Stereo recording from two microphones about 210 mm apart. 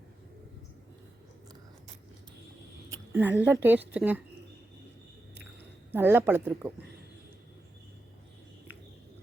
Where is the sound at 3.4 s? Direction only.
10° right (ahead or behind).